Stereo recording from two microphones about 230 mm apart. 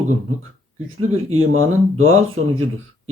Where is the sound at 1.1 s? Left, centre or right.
Right.